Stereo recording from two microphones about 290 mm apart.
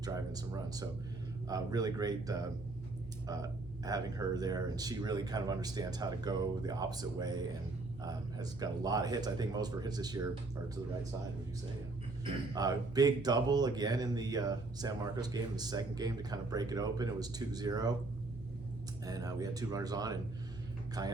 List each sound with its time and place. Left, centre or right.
0.0 s speech: centre
12.2 s speech: centre
19.0 s speech: centre